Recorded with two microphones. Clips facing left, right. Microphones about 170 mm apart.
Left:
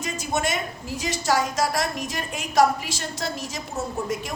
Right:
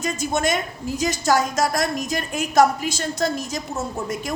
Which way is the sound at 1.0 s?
45° right (ahead or behind).